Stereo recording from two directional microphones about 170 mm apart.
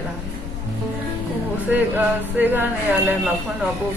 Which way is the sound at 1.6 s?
10° right (ahead or behind).